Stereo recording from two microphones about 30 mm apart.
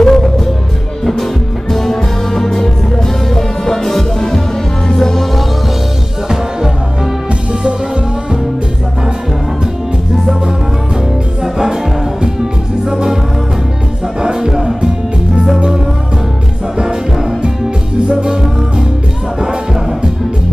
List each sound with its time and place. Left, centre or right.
0.0 s music: centre
1.7 s music: centre
11.5 s music: centre
14.2 s music: right
18.0 s music: right